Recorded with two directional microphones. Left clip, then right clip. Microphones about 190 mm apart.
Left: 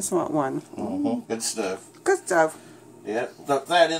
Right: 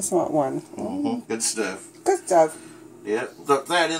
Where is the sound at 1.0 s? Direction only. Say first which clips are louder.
Even; 35° left (ahead or behind).